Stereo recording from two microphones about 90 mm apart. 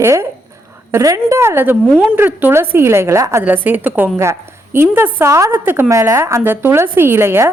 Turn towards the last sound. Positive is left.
turn(degrees=-30)  # may be behind; listen again after turning